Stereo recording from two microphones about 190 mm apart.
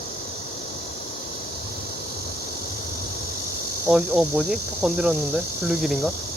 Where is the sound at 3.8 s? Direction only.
5° right (ahead or behind).